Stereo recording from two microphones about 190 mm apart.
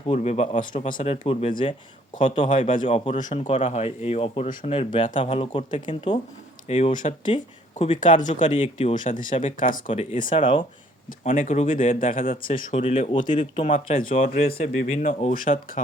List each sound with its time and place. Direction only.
0.1 s speech: 35° left (ahead or behind)
2.2 s speech: 40° left (ahead or behind)
6.7 s speech: 35° left (ahead or behind)
10.2 s speech: 25° left (ahead or behind)
11.2 s speech: 40° left (ahead or behind)
14.4 s speech: 35° left (ahead or behind)